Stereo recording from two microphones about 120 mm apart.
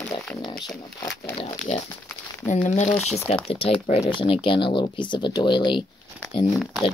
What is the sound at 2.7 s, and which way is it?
Speech, 80° left.